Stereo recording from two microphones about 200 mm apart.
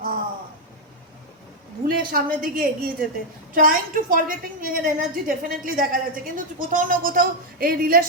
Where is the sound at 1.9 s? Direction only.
45° right (ahead or behind).